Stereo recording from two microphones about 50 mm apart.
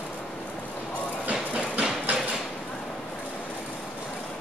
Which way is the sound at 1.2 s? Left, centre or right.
Right.